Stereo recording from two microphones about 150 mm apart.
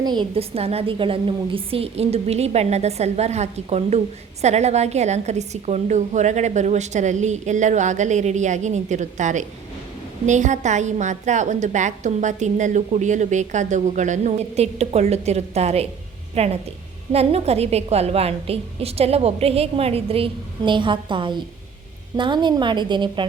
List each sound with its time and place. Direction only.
0.0 s a woman's voice: 30° right (ahead or behind)
0.3 s a woman's voice: 40° right (ahead or behind)